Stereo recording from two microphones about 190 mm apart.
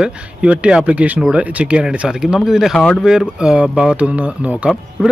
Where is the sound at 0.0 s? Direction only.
5° right (ahead or behind).